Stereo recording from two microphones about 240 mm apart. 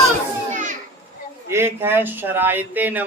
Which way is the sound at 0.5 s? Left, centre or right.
Right.